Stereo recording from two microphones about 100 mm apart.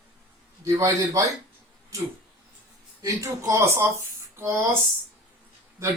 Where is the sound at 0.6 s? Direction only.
35° right (ahead or behind).